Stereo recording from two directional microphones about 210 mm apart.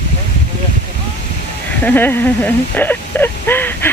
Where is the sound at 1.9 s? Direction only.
10° left (ahead or behind).